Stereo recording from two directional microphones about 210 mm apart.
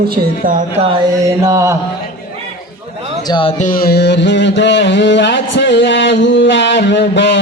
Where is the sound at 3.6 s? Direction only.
40° left (ahead or behind); by 7.4 s 60° left (ahead or behind).